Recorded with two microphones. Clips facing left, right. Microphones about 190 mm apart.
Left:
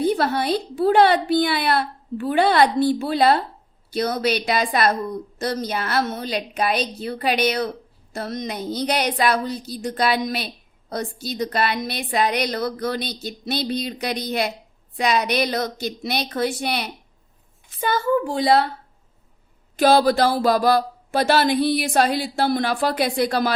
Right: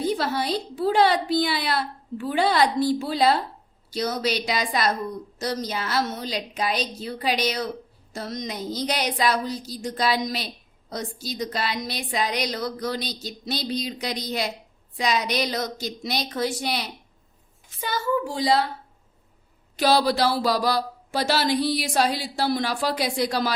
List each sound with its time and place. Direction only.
0.0 s a woman's voice: 60° left (ahead or behind)
19.7 s a woman's voice: 50° left (ahead or behind)